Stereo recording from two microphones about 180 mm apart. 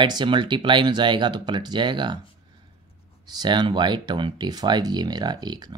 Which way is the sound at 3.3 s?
25° right (ahead or behind).